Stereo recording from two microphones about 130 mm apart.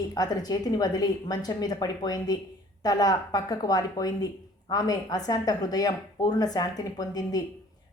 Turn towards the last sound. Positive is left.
turn(degrees=30)  # may be behind; listen again after turning